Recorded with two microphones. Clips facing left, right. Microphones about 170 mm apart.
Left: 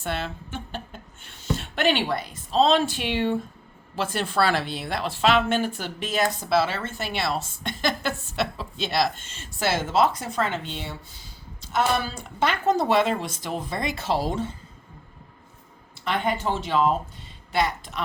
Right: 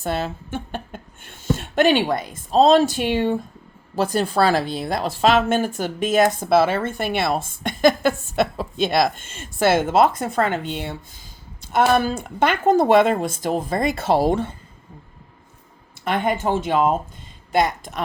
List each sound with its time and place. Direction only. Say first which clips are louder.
0.0 s speech: right 5 dB; 40° right (ahead or behind); by 14.5 s 60° right (ahead or behind)
16.0 s speech: right 4 dB; 50° right (ahead or behind)